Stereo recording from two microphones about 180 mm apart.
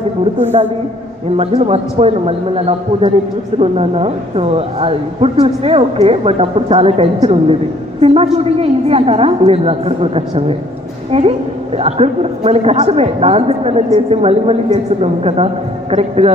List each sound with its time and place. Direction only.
1.3 s a man's voice: 35° right (ahead or behind)